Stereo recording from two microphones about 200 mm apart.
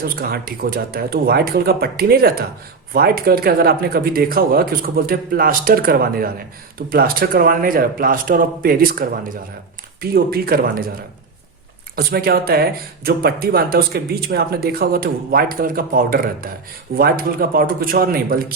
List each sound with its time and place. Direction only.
0.0 s speech: 50° right (ahead or behind)
11.9 s speech: 50° right (ahead or behind)